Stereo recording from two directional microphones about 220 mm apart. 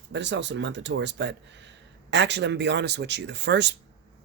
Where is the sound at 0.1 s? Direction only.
55° right (ahead or behind).